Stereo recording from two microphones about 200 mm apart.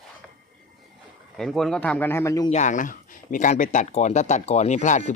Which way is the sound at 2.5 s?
35° left (ahead or behind).